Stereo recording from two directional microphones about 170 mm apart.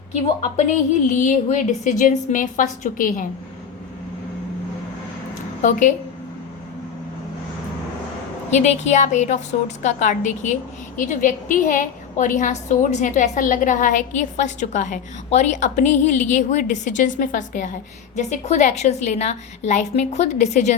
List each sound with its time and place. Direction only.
1.2 s a woman's voice: 50° left (ahead or behind)
5.6 s a woman's voice: 45° left (ahead or behind)
8.4 s a woman's voice: 40° left (ahead or behind)